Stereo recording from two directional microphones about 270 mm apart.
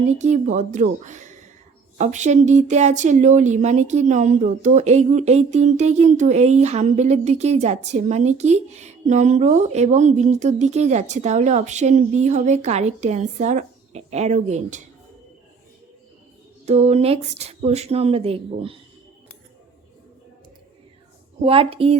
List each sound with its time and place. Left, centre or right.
0.2 s speech: right
16.6 s speech: right
21.4 s speech: right